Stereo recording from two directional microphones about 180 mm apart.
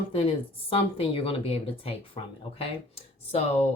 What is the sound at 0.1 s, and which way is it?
Speech, 30° left (ahead or behind).